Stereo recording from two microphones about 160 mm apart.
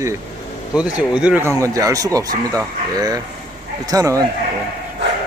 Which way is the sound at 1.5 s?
20° right (ahead or behind).